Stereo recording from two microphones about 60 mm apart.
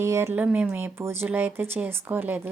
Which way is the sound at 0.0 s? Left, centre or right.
Right.